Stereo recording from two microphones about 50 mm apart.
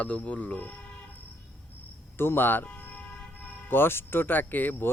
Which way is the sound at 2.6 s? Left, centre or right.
Left.